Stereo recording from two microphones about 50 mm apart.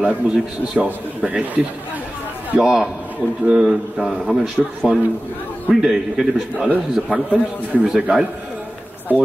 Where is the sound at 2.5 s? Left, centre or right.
Centre.